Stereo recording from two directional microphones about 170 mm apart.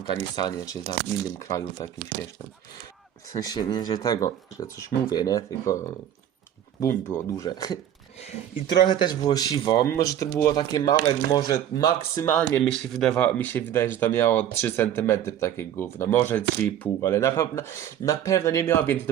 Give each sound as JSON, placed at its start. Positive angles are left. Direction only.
{"t": 0.0, "sound": "speech", "side_deg": 25}
{"t": 3.3, "sound": "speech", "side_deg": 20}
{"t": 12.9, "sound": "speech", "side_deg": 0}